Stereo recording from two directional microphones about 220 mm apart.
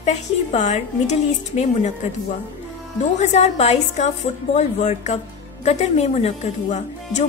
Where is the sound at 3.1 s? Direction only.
30° left (ahead or behind).